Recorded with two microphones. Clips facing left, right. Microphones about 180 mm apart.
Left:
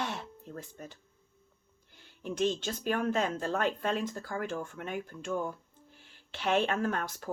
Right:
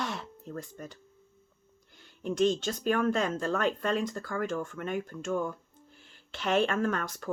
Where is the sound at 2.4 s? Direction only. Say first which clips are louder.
Right 4 dB; 45° right (ahead or behind).